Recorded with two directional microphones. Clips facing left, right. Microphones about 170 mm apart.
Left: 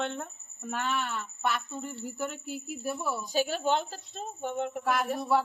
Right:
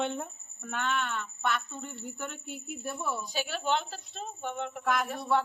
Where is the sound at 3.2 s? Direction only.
45° left (ahead or behind).